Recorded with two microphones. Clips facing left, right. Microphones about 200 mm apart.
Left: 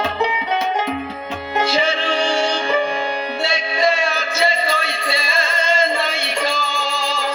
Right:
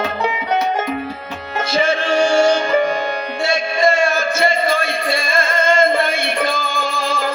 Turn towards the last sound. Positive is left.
turn(degrees=-55)  # may be behind; listen again after turning